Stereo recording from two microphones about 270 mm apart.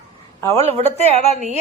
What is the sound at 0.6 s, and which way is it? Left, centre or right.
Speech, right.